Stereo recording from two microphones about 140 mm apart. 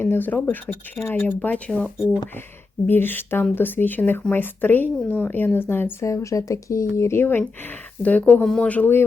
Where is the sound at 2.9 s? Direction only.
15° left (ahead or behind).